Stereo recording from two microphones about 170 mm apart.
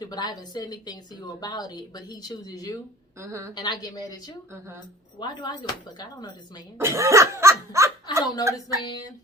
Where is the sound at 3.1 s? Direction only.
15° right (ahead or behind).